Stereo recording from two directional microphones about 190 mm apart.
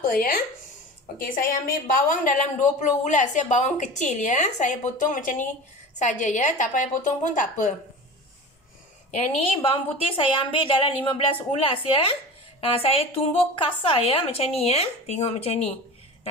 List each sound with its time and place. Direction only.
0.0 s a woman's voice: 50° left (ahead or behind)
9.1 s a woman's voice: 30° left (ahead or behind)